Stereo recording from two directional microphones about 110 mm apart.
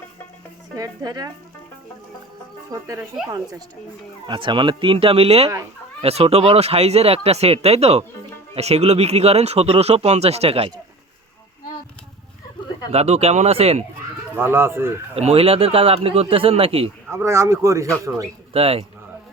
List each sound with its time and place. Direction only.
0.8 s speech: 35° right (ahead or behind)
2.8 s speech: 30° right (ahead or behind)
4.3 s speech: 45° right (ahead or behind); by 10.7 s 65° right (ahead or behind)
12.9 s speech: 70° right (ahead or behind)
14.3 s speech: 20° right (ahead or behind)
15.1 s speech: 65° right (ahead or behind)
17.1 s speech: 25° right (ahead or behind)
18.5 s speech: 60° right (ahead or behind)